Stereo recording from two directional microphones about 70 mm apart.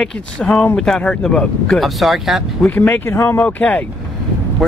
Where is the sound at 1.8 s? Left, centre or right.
Centre.